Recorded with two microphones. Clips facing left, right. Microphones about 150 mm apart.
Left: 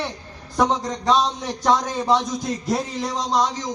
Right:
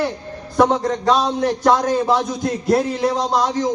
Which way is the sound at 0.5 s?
55° right (ahead or behind).